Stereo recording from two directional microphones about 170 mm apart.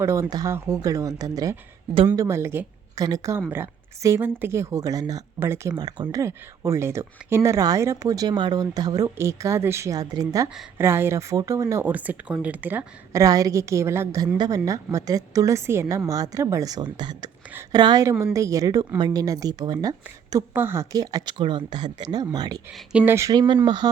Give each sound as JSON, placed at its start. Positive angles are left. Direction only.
{"t": 0.0, "sound": "a woman's voice", "side_deg": -15}
{"t": 22.9, "sound": "a woman's voice", "side_deg": -10}